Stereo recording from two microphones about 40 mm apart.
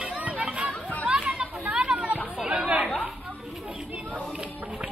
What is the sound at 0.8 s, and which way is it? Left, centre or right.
Chatter, left.